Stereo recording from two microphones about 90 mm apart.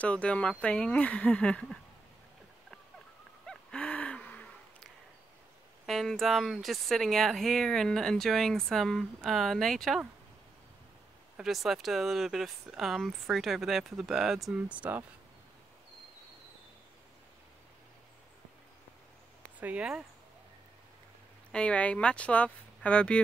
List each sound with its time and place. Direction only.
0.0 s speech: 15° left (ahead or behind)
3.4 s owl: 10° left (ahead or behind)
5.9 s speech: centre (ahead or behind)
11.3 s speech: 5° right (ahead or behind)
14.7 s speech: 20° right (ahead or behind)
19.6 s speech: 15° right (ahead or behind)
21.5 s speech: 10° left (ahead or behind)